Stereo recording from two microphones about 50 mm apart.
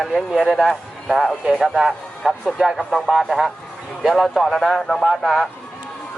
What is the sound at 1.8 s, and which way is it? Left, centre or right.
A man's voice, centre.